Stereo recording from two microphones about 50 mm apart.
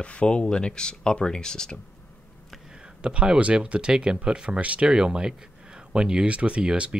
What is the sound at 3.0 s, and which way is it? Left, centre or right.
Speech, centre.